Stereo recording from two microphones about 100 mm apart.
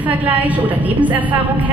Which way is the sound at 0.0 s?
15° right (ahead or behind).